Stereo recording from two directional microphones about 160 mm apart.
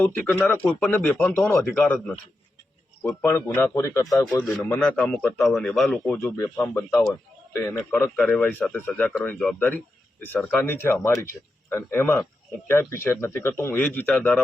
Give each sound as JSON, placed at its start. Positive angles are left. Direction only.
{"t": 0.0, "sound": "speech", "side_deg": 10}
{"t": 4.4, "sound": "speech", "side_deg": 5}
{"t": 6.1, "sound": "speech", "side_deg": 15}